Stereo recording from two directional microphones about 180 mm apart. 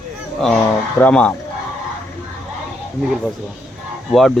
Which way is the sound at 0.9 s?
10° left (ahead or behind).